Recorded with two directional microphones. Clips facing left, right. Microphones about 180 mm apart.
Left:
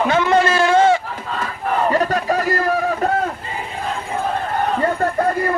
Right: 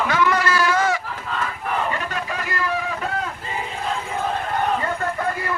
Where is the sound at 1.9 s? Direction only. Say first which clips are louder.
Left 9 dB; 40° left (ahead or behind).